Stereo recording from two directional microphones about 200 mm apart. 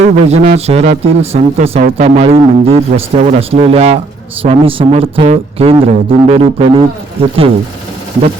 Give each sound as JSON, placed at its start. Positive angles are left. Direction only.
{"t": 0.0, "sound": "speech", "side_deg": -35}